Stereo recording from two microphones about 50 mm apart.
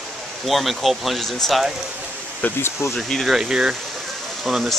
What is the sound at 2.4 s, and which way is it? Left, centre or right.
Speech, left.